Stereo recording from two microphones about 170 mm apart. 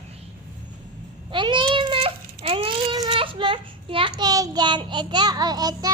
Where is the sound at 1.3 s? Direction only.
30° right (ahead or behind).